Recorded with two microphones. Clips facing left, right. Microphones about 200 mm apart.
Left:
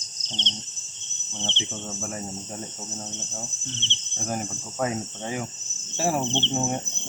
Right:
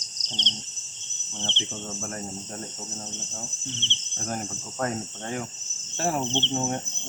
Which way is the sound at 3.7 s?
15° right (ahead or behind).